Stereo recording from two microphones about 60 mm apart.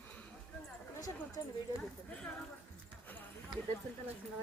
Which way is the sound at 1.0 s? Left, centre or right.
Left.